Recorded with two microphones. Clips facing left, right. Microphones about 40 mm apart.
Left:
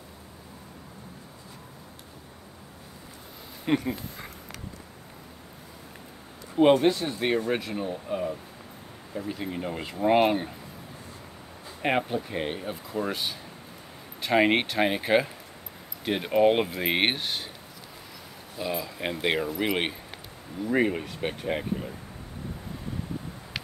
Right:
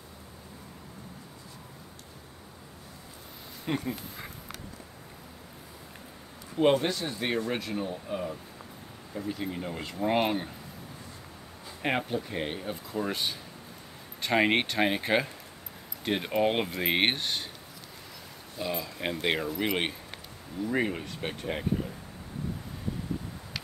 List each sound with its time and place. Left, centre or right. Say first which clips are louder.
3.6 s speech: left 6 dB; left
6.6 s speech: left 5 dB; centre
11.8 s speech: left 3 dB; centre
18.6 s speech: left 2 dB; centre